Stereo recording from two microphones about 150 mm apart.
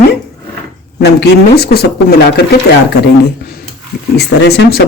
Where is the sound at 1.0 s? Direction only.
90° left.